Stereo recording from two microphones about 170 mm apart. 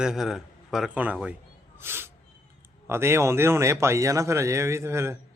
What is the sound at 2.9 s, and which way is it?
Speech, 15° right (ahead or behind).